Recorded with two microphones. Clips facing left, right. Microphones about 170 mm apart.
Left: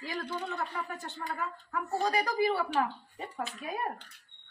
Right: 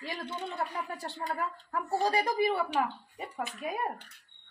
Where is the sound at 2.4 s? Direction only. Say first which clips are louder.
Even; 15° right (ahead or behind).